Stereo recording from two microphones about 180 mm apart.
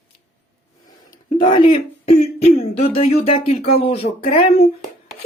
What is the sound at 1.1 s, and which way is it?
Speech, 25° left (ahead or behind).